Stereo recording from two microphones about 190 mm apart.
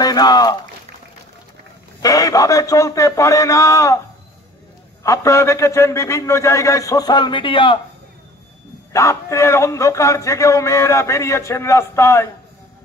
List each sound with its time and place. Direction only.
0.0 s speech: 20° left (ahead or behind)
2.0 s a man's voice: 20° left (ahead or behind)
5.0 s a man's voice: 15° left (ahead or behind)
8.9 s a man's voice: 15° left (ahead or behind)